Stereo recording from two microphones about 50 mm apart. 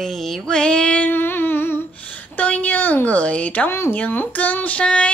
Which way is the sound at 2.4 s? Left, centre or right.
Left.